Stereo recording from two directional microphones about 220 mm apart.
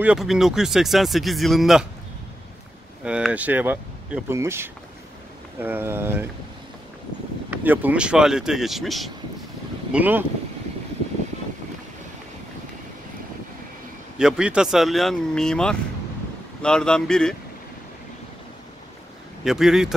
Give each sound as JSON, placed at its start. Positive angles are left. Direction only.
{"t": 0.0, "sound": "speech", "side_deg": -5}
{"t": 3.0, "sound": "speech", "side_deg": -5}
{"t": 7.5, "sound": "speech", "side_deg": -10}
{"t": 14.1, "sound": "speech", "side_deg": -5}
{"t": 19.4, "sound": "speech", "side_deg": 0}